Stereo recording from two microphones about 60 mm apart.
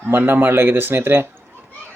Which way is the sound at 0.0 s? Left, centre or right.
Right.